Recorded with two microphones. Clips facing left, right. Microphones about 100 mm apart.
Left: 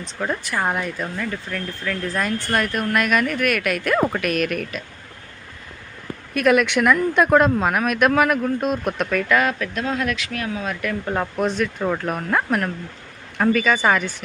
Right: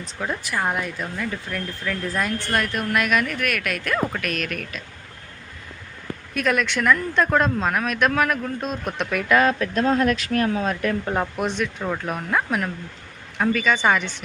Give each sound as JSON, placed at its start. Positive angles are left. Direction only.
{"t": 0.0, "sound": "speech", "side_deg": 0}
{"t": 6.3, "sound": "speech", "side_deg": 5}
{"t": 9.3, "sound": "speech", "side_deg": -30}
{"t": 11.0, "sound": "speech", "side_deg": -10}
{"t": 11.4, "sound": "speech", "side_deg": 0}